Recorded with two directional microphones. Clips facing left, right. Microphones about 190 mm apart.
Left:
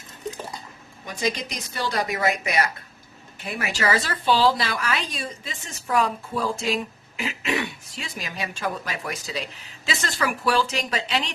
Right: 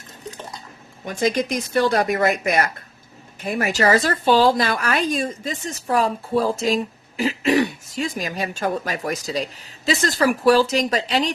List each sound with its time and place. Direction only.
1.0 s speech: 50° right (ahead or behind)